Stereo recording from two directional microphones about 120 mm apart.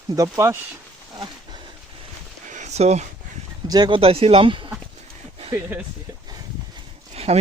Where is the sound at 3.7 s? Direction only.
40° right (ahead or behind).